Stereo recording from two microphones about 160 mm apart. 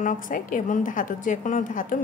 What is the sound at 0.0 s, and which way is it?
A woman's voice, 55° left (ahead or behind).